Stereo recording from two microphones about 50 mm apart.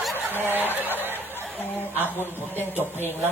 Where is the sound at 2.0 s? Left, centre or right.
Left.